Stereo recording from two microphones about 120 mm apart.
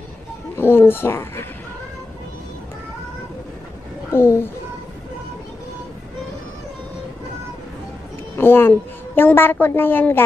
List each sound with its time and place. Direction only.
0.6 s speech: 20° left (ahead or behind)
4.1 s a child's voice: 20° left (ahead or behind)
8.4 s a woman's voice: 20° left (ahead or behind)